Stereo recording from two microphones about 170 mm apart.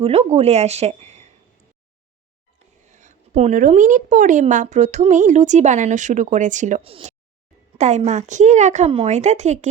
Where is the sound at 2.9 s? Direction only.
45° right (ahead or behind).